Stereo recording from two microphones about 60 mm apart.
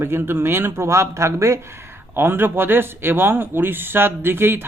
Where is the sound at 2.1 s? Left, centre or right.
Right.